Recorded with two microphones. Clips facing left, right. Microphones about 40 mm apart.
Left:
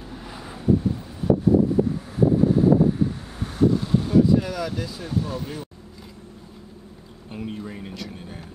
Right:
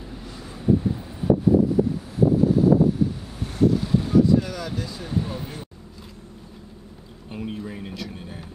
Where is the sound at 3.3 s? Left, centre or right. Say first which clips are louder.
Left 1 dB; centre.